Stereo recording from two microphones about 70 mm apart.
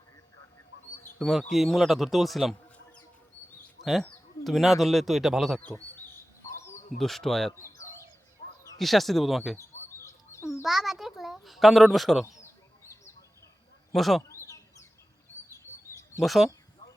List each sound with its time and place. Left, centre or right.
1.2 s a man's voice: centre
3.8 s a sound: left
4.4 s a man's voice: centre
7.0 s a man's voice: centre
7.6 s bird: left
8.8 s a man's voice: centre
10.0 s chicken: left
10.6 s a sound: centre
13.9 s speech: centre
14.2 s bird: left
16.2 s a man's voice: centre